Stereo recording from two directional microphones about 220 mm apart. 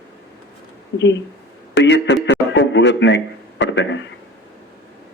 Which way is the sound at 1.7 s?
55° left (ahead or behind).